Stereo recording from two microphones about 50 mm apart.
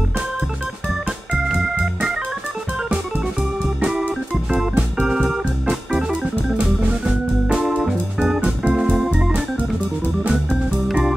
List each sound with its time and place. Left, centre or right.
1.5 s organ: centre
3.6 s organ: centre
5.0 s music: centre
7.1 s organ: centre
8.4 s music: right
10.3 s organ: centre